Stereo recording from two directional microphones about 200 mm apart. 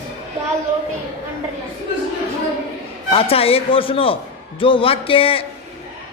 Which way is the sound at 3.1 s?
30° left (ahead or behind).